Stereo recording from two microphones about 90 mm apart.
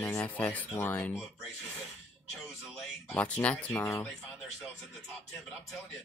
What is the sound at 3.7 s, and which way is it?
Speech, 30° left (ahead or behind).